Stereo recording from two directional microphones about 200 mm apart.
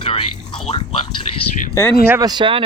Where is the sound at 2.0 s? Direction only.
15° right (ahead or behind).